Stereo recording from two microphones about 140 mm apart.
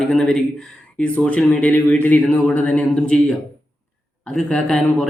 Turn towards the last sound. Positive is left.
turn(degrees=5)  # may be behind; listen again after turning